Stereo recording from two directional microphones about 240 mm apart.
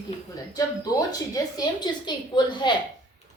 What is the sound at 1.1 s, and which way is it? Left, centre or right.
A child's voice, centre.